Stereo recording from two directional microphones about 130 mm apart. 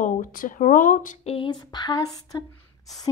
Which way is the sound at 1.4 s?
30° left (ahead or behind).